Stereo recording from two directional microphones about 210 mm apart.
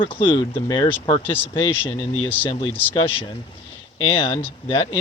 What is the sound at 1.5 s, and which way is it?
Speech, 25° left (ahead or behind).